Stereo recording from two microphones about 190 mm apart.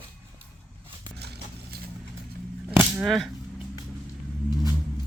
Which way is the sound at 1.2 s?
60° right (ahead or behind).